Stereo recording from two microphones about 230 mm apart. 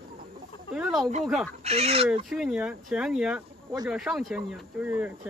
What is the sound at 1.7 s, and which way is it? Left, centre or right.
Speech, right.